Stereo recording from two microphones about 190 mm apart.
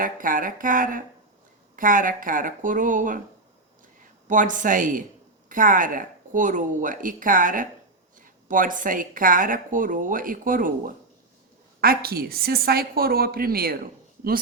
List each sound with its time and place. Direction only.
0.0 s speech: 45° right (ahead or behind)
4.3 s speech: 45° right (ahead or behind)